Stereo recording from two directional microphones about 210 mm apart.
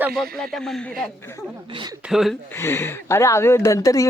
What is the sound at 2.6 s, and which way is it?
Speech, 10° left (ahead or behind).